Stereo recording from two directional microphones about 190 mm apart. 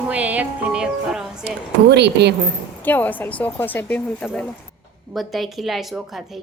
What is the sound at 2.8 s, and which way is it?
A woman's voice, 10° left (ahead or behind).